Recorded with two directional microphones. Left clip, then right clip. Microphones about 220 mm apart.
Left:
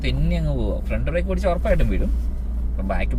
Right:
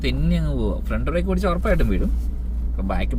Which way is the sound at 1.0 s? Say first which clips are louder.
Even; 20° right (ahead or behind).